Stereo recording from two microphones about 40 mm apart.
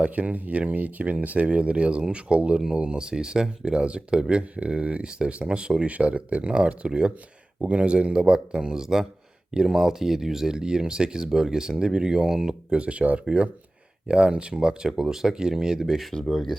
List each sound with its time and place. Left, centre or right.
0.0 s speech: right
3.0 s speech: right
5.9 s speech: right; by 12.5 s centre
12.7 s speech: right
15.8 s speech: centre